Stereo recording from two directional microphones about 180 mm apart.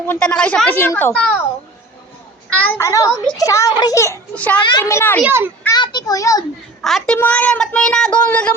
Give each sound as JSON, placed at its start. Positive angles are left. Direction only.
{"t": 0.1, "sound": "a child's voice", "side_deg": 5}
{"t": 2.6, "sound": "a child's voice", "side_deg": 15}
{"t": 4.5, "sound": "a child's voice", "side_deg": 25}
{"t": 4.8, "sound": "a child's voice", "side_deg": 15}
{"t": 5.2, "sound": "a child's voice", "side_deg": -10}
{"t": 5.6, "sound": "a child's voice", "side_deg": 25}
{"t": 6.8, "sound": "a child's voice", "side_deg": 0}